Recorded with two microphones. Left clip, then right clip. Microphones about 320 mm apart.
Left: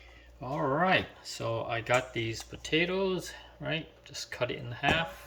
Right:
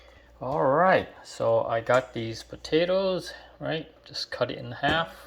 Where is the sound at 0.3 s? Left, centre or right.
Centre.